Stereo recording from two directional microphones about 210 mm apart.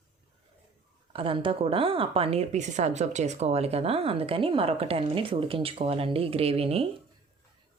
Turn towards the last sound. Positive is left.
turn(degrees=-30)  # may be behind; listen again after turning